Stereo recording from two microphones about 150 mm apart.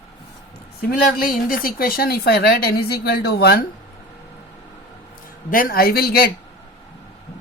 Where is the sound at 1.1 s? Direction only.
70° left (ahead or behind); by 3.6 s 90° left.